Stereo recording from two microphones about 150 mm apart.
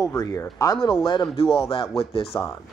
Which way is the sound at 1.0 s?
30° left (ahead or behind).